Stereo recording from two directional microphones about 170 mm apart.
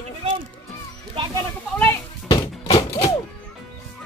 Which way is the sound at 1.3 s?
15° left (ahead or behind).